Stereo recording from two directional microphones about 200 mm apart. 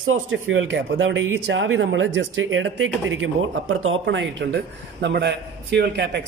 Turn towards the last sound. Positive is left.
turn(degrees=-60)  # may be behind; listen again after turning